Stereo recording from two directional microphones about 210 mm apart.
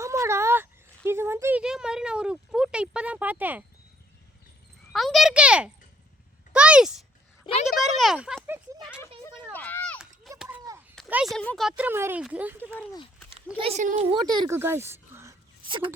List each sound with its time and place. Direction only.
0.0 s a sound: 15° right (ahead or behind)
4.9 s a child's voice: centre (ahead or behind)
6.5 s a sound: 5° right (ahead or behind)
9.0 s a sound: 10° left (ahead or behind)
10.0 s children playing: centre (ahead or behind)
11.1 s speech: 10° right (ahead or behind)
11.3 s speech: 5° left (ahead or behind)
11.8 s speech: 10° right (ahead or behind)
13.6 s speech: 30° right (ahead or behind)
14.1 s speech: 20° right (ahead or behind)
15.6 s speech: 25° right (ahead or behind)